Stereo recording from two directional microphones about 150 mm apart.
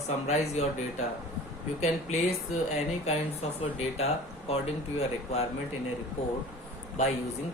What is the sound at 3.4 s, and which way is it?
Speech, 45° left (ahead or behind).